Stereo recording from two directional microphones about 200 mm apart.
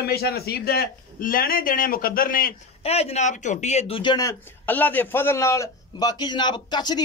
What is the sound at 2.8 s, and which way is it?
Speech, 30° left (ahead or behind).